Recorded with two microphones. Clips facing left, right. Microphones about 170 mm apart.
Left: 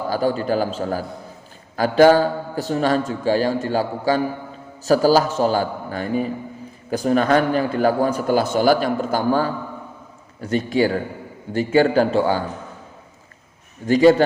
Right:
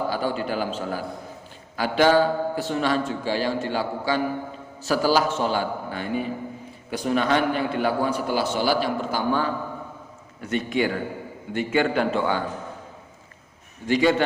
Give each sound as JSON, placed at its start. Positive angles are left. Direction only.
{"t": 0.1, "sound": "a man's voice", "side_deg": 40}
{"t": 13.8, "sound": "a man's voice", "side_deg": 40}